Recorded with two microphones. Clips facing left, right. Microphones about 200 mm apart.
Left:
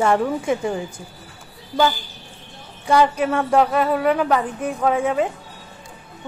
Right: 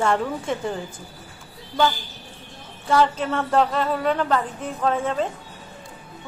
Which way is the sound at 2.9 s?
15° left (ahead or behind).